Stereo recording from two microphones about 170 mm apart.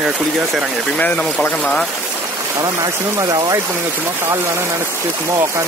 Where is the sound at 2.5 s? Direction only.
15° right (ahead or behind).